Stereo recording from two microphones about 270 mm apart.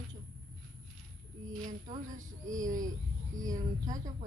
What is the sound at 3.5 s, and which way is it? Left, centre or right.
Speech, centre.